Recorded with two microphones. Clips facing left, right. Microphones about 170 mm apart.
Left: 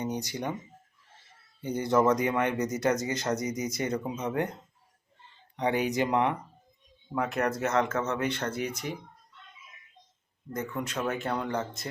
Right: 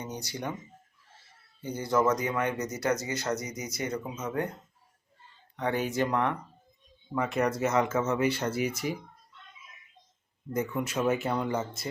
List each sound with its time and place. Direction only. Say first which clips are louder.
0.0 s speech: left 4 dB; 15° left (ahead or behind)
1.6 s speech: left 2 dB; 20° left (ahead or behind)
5.5 s speech: left 2 dB; 15° left (ahead or behind)
7.1 s speech: right 1 dB; centre (ahead or behind)
10.5 s speech: right 3 dB; 10° right (ahead or behind)